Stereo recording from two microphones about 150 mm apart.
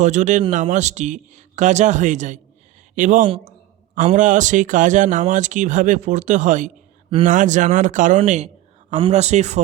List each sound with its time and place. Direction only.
0.0 s speech: 55° right (ahead or behind)